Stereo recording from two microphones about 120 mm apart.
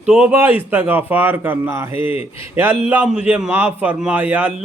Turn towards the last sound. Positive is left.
turn(degrees=-10)  # may be behind; listen again after turning